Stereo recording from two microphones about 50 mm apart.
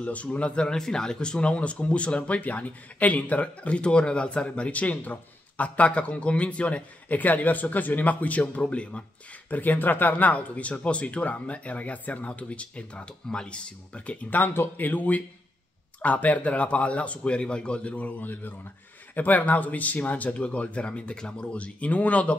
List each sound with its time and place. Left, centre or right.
0.0 s speech: left
9.5 s speech: left
14.4 s speech: left